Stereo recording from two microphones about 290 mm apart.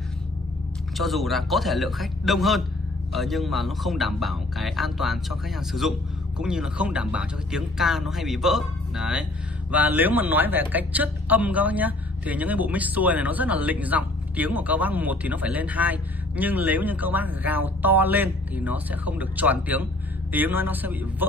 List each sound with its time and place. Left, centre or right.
0.9 s a man's voice: centre